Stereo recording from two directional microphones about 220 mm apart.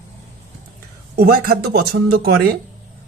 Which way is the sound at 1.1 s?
45° right (ahead or behind).